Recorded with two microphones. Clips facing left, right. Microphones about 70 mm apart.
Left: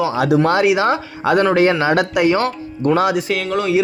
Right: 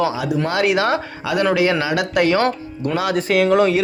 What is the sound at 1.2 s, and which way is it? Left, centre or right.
Speech, left.